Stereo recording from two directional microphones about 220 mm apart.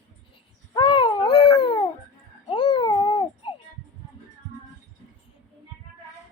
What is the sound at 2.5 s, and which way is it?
Babbling, 20° left (ahead or behind).